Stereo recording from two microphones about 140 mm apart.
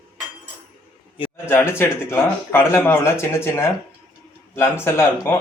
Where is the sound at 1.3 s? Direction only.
20° left (ahead or behind).